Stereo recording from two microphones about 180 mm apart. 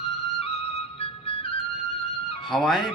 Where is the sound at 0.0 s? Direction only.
35° left (ahead or behind).